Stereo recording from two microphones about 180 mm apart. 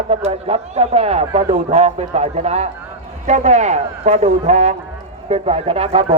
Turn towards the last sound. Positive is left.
turn(degrees=-35)  # may be behind; listen again after turning